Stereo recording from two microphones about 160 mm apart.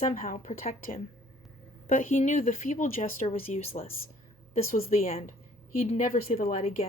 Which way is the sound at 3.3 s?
40° left (ahead or behind).